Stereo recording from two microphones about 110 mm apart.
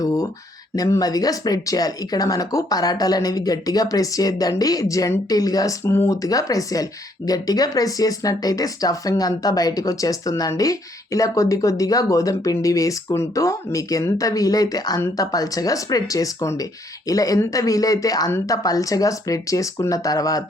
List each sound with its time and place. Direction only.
0.8 s speech: 35° left (ahead or behind)
5.8 s speech: 20° left (ahead or behind)